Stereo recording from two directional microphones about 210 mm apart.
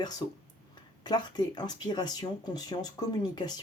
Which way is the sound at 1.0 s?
20° left (ahead or behind).